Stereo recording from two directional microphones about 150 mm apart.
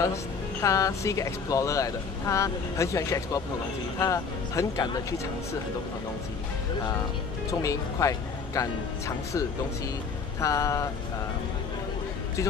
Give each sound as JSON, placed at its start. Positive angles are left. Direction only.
{"t": 0.0, "sound": "speech", "side_deg": 20}
{"t": 7.5, "sound": "speech", "side_deg": 20}